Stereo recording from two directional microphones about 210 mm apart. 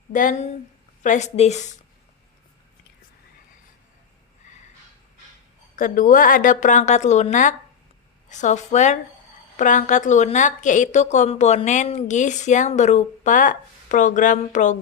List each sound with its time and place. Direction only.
0.1 s a woman's voice: 40° left (ahead or behind)
5.7 s a woman's voice: 40° left (ahead or behind)